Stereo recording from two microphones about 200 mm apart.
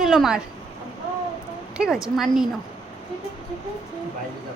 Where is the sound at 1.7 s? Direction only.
5° right (ahead or behind).